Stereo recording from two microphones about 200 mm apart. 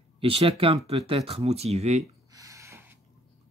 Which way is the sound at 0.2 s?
30° right (ahead or behind).